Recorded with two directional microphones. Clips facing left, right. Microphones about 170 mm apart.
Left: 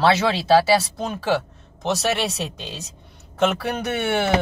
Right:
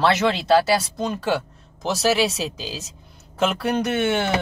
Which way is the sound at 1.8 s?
Centre (ahead or behind).